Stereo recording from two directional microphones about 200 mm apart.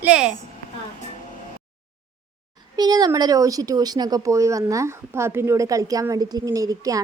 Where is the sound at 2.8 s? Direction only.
20° right (ahead or behind).